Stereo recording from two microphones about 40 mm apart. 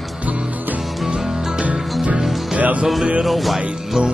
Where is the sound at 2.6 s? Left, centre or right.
Right.